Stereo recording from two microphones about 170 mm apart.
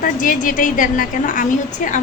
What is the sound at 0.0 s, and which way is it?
A woman's voice, 50° left (ahead or behind).